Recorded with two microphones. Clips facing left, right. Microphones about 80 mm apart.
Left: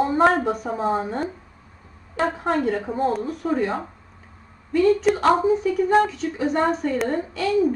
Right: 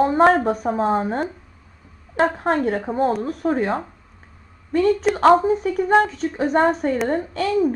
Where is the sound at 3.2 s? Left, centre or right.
Right.